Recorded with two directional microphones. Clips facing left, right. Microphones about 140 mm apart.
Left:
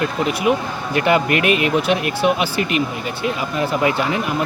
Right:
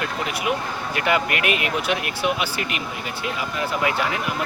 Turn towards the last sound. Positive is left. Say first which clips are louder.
# left 5 dB
turn(degrees=30)  # may be behind; listen again after turning